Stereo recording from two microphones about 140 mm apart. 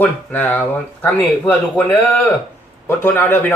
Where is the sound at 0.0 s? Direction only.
10° left (ahead or behind).